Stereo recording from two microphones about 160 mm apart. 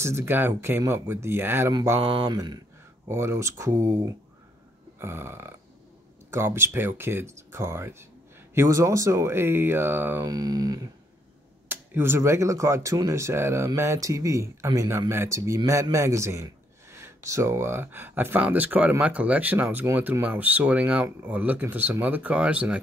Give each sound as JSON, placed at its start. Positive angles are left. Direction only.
{"t": 0.0, "sound": "speech", "side_deg": -15}
{"t": 1.7, "sound": "mantra", "side_deg": -25}
{"t": 3.1, "sound": "speech", "side_deg": -15}
{"t": 10.2, "sound": "mantra", "side_deg": -25}
{"t": 11.7, "sound": "speech", "side_deg": -15}